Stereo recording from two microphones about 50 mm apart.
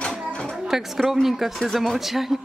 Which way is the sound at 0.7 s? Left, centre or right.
Centre.